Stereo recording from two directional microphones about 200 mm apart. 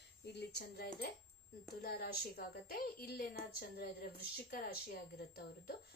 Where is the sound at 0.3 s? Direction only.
55° left (ahead or behind).